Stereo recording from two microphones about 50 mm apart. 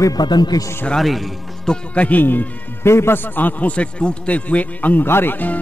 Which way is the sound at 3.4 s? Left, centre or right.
Left.